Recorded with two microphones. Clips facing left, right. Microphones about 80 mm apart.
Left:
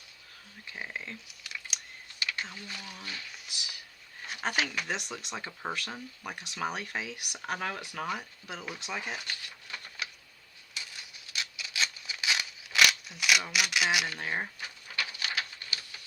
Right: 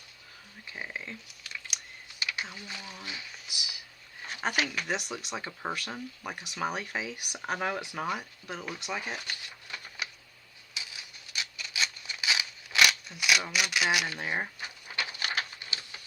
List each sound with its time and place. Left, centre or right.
0.7 s speech: centre
8.0 s speech: centre
9.7 s a sound: centre
13.5 s speech: centre
14.2 s speech: centre
14.6 s bird: right
15.5 s a sound: right